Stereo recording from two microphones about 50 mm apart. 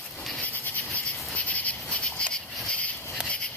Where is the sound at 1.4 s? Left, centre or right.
Left.